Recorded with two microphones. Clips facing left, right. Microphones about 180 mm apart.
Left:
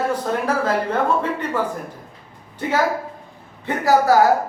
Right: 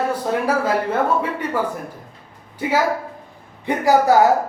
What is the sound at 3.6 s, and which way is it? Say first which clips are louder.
Speech: right 1 dB; 15° right (ahead or behind).